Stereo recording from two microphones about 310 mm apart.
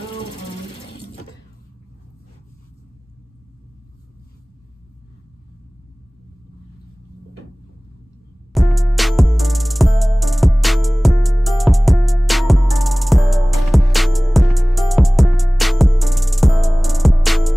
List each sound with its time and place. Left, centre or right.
8.5 s music: centre